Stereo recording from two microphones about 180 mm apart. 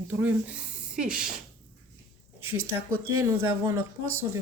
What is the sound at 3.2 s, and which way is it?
Speech, 15° right (ahead or behind).